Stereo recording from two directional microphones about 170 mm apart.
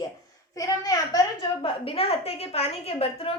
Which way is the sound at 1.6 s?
35° left (ahead or behind).